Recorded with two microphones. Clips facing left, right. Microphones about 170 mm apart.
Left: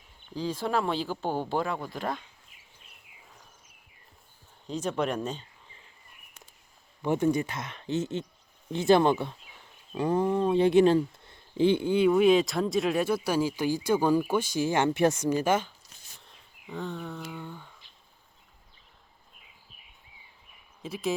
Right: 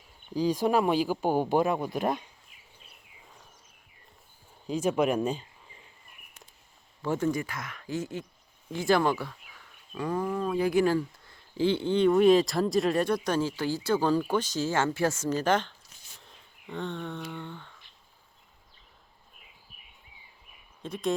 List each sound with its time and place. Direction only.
0.3 s speech: 15° right (ahead or behind)
4.6 s speech: 10° right (ahead or behind)
7.0 s speech: 20° left (ahead or behind)
20.8 s speech: 5° left (ahead or behind)